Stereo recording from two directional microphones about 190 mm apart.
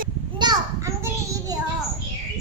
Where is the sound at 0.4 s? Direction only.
20° right (ahead or behind).